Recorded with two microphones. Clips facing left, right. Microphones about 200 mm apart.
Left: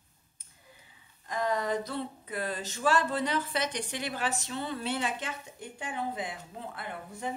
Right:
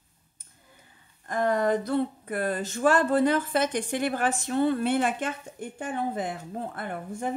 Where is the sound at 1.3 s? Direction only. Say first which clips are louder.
Right 6 dB; 55° right (ahead or behind).